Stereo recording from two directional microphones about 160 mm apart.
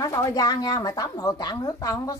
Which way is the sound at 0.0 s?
20° left (ahead or behind).